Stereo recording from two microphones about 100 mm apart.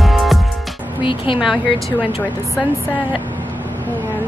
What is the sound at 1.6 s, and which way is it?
Speech, 15° left (ahead or behind).